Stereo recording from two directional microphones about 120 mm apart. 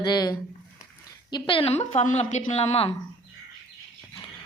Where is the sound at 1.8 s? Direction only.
65° left (ahead or behind).